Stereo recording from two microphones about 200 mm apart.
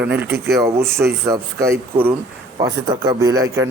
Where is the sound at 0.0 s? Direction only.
10° right (ahead or behind).